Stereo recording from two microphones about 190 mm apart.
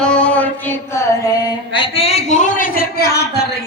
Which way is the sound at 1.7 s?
30° left (ahead or behind).